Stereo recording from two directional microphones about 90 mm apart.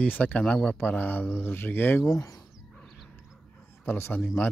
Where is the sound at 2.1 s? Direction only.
40° left (ahead or behind).